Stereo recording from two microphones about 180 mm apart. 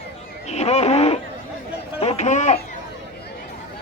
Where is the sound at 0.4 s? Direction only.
35° left (ahead or behind).